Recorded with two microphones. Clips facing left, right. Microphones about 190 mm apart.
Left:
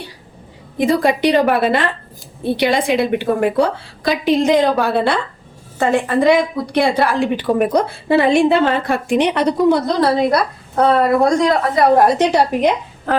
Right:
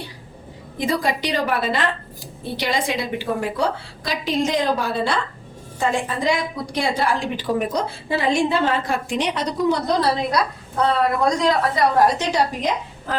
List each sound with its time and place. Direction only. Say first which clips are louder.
0.8 s a woman's voice: left 8 dB; 60° left (ahead or behind)